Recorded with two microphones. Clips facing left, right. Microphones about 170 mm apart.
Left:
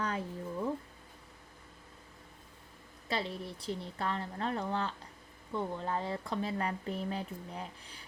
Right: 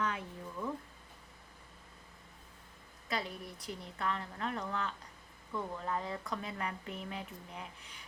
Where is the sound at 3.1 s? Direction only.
30° left (ahead or behind).